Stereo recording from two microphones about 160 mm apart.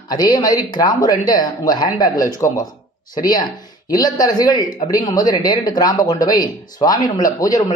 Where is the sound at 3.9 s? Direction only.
25° left (ahead or behind).